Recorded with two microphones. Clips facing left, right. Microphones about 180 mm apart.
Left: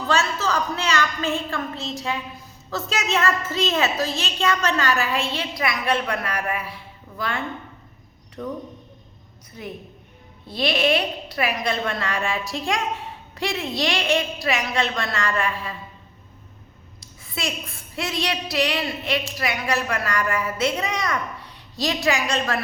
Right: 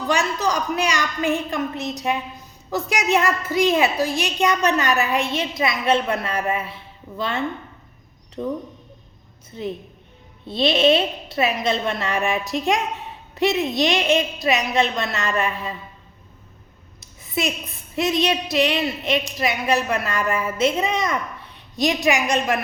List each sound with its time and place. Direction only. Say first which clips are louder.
0.1 s a woman's voice: right 1 dB; 15° right (ahead or behind)
9.5 s a woman's voice: right 6 dB; 25° right (ahead or behind)
17.0 s a woman's voice: right 6 dB; 20° right (ahead or behind)